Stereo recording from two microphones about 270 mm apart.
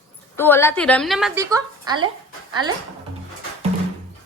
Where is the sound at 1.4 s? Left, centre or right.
Centre.